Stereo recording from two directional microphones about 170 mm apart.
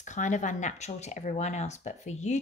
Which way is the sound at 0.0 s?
45° left (ahead or behind).